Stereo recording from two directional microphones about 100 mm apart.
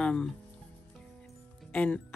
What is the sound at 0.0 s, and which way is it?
Speech, 10° left (ahead or behind).